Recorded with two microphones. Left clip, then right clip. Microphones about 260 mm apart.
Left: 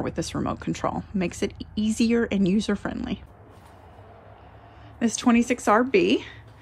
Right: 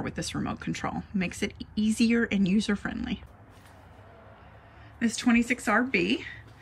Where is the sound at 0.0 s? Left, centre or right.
Centre.